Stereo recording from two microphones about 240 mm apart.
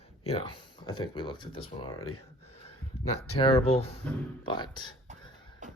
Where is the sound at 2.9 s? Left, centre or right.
Left.